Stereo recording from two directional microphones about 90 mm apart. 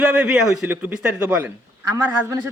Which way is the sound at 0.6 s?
20° right (ahead or behind).